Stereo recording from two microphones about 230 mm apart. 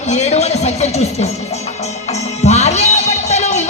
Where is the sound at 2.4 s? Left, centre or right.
Left.